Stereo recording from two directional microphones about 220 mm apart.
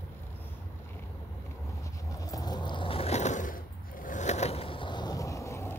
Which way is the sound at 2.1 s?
15° left (ahead or behind).